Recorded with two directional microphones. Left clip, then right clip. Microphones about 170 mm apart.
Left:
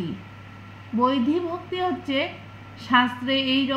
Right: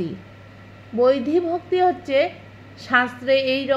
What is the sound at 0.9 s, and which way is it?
A woman's voice, 45° right (ahead or behind).